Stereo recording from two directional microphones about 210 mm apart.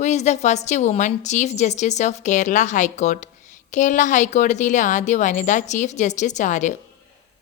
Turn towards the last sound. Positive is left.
turn(degrees=35)  # may be behind; listen again after turning